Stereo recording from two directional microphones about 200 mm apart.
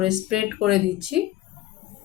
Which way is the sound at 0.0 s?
5° right (ahead or behind).